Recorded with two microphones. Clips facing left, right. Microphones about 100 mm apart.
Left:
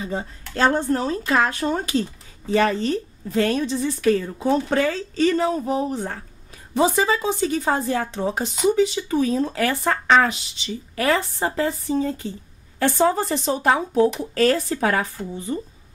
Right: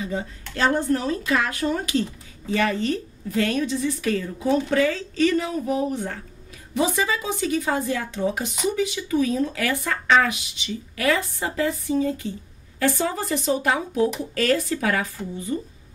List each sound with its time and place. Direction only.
0.0 s speech: 30° left (ahead or behind)